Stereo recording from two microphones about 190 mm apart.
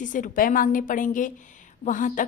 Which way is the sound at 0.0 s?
45° left (ahead or behind).